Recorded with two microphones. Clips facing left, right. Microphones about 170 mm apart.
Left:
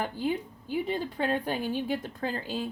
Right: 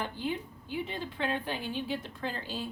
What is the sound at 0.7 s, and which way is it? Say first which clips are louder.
A woman's voice: left 6 dB; 40° left (ahead or behind).